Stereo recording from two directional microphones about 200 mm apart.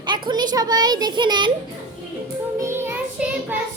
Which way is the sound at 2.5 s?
15° right (ahead or behind).